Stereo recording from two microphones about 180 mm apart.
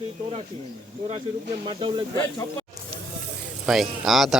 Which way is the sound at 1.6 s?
30° right (ahead or behind).